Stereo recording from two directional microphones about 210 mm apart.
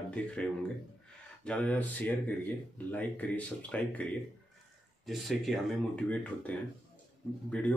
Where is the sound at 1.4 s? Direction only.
5° left (ahead or behind).